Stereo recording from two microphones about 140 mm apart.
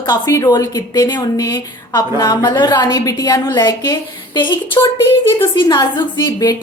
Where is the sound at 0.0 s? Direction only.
25° left (ahead or behind).